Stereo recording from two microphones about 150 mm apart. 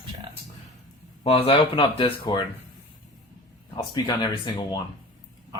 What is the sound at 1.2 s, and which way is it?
Speech, 35° left (ahead or behind).